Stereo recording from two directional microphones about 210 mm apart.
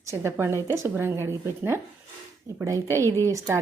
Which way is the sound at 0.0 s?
15° right (ahead or behind).